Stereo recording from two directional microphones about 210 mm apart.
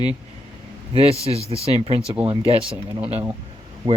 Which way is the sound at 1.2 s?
30° right (ahead or behind).